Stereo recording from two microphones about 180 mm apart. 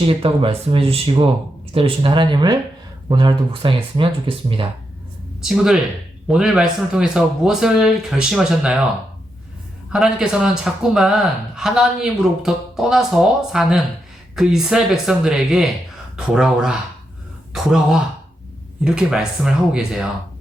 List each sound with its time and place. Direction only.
0.0 s speech: 30° right (ahead or behind)
5.5 s a man's voice: centre (ahead or behind)
9.9 s a man's voice: centre (ahead or behind)